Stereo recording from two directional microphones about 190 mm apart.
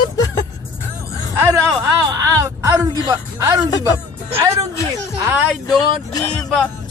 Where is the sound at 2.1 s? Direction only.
15° right (ahead or behind).